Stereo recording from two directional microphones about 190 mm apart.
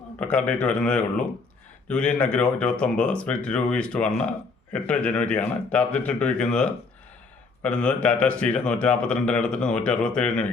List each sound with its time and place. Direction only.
0.2 s a man's voice: 5° left (ahead or behind)